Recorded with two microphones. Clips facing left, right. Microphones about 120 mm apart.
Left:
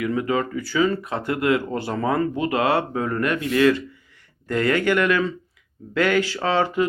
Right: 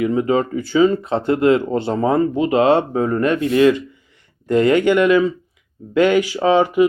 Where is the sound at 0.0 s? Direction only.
25° right (ahead or behind).